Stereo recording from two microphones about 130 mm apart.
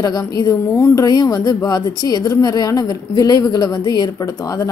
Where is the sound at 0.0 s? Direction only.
30° left (ahead or behind).